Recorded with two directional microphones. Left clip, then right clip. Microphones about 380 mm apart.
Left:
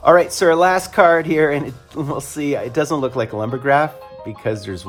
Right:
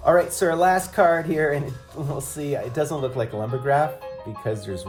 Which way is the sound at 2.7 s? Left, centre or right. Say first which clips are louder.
Left 6 dB; centre.